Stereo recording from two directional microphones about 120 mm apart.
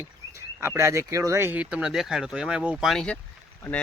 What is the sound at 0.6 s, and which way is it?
Speech, 20° right (ahead or behind).